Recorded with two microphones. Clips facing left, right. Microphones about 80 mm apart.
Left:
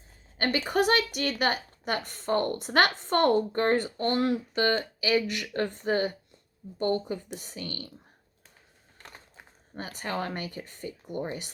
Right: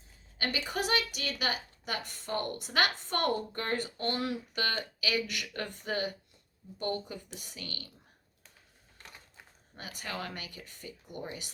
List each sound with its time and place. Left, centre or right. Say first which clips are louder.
0.3 s a woman's voice: left 8 dB; left
9.7 s a woman's voice: left 7 dB; left